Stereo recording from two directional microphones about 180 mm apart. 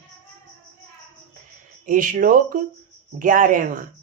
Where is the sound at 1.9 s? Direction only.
50° right (ahead or behind).